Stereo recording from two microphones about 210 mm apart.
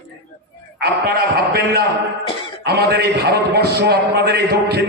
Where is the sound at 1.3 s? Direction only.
45° right (ahead or behind).